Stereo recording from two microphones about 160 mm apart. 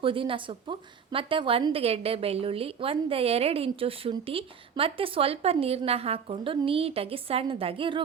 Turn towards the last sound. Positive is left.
turn(degrees=-35)  # may be behind; listen again after turning